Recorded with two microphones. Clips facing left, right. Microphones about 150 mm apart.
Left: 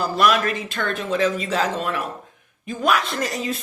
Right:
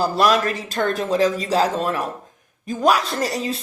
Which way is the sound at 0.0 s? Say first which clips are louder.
Right 2 dB; 35° right (ahead or behind).